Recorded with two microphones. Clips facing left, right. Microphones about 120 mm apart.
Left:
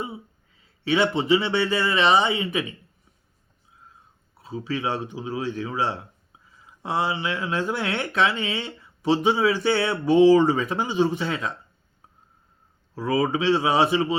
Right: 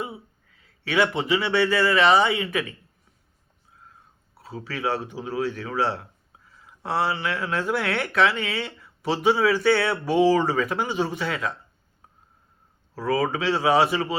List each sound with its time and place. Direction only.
0.6 s speech: 25° left (ahead or behind)
4.4 s speech: 20° left (ahead or behind)
13.0 s speech: 20° left (ahead or behind)